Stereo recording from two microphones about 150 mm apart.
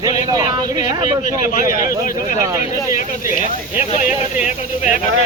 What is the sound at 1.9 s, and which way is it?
Speech, 65° left (ahead or behind).